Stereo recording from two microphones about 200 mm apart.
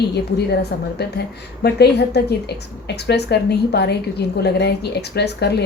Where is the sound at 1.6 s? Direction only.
55° left (ahead or behind).